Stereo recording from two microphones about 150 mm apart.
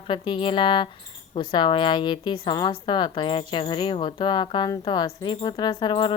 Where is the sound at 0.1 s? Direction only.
35° left (ahead or behind).